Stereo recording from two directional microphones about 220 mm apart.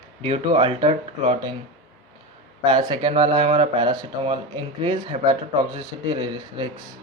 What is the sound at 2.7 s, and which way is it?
Speech, 20° right (ahead or behind).